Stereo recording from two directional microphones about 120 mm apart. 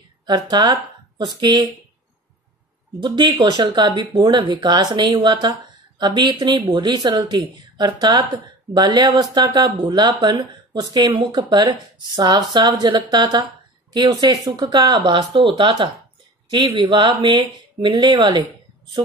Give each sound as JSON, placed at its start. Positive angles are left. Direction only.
{"t": 0.3, "sound": "speech", "side_deg": -35}
{"t": 3.0, "sound": "speech", "side_deg": -35}